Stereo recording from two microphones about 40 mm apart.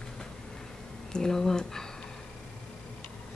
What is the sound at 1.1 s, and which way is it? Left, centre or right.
Speech, centre.